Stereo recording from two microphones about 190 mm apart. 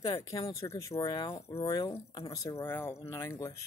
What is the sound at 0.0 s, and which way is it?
Speech, 20° left (ahead or behind).